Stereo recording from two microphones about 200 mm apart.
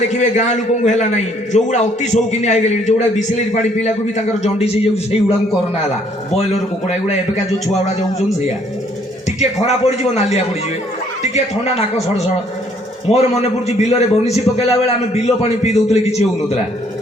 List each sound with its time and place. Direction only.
0.1 s a man's voice: 35° left (ahead or behind)
6.3 s a man's voice: 35° left (ahead or behind)
9.4 s a man's voice: 35° left (ahead or behind)